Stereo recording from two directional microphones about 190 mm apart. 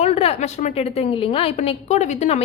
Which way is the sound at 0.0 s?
35° left (ahead or behind).